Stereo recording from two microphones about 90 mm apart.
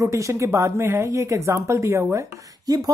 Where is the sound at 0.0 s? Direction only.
35° right (ahead or behind).